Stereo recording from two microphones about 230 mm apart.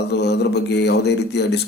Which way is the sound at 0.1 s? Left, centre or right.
Left.